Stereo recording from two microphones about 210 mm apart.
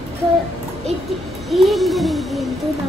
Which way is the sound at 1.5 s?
Centre (ahead or behind).